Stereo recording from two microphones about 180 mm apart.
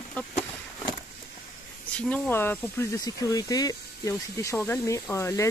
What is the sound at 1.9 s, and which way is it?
Speech, 5° left (ahead or behind).